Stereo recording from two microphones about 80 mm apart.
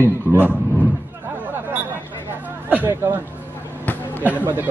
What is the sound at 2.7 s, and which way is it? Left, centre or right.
Speech, right.